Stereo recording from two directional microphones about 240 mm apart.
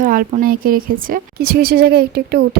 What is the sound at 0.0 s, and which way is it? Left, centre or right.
A woman's voice, right.